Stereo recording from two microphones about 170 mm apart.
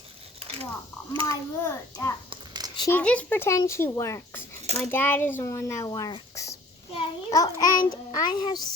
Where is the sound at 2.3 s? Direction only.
25° right (ahead or behind).